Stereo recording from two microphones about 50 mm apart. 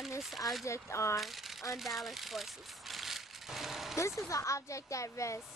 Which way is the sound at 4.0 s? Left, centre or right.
Left.